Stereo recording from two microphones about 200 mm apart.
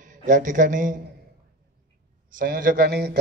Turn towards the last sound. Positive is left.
turn(degrees=-55)  # may be behind; listen again after turning